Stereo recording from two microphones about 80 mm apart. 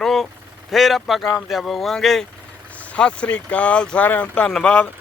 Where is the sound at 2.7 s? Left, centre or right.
Centre.